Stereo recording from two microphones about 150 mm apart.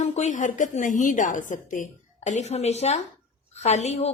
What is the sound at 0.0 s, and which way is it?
A woman's voice, 50° left (ahead or behind).